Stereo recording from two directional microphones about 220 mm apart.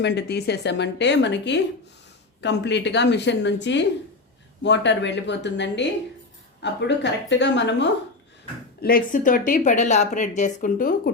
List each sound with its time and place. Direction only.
0.0 s speech: 50° left (ahead or behind)
8.8 s speech: 40° left (ahead or behind)